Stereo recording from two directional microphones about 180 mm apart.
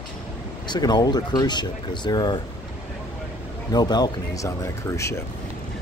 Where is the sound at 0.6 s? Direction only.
25° left (ahead or behind).